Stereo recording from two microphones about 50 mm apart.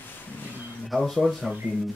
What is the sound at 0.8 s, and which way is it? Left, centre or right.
Speech, centre.